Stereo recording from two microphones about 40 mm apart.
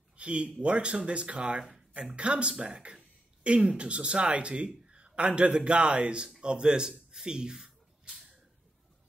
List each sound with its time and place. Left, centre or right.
0.2 s a man's voice: right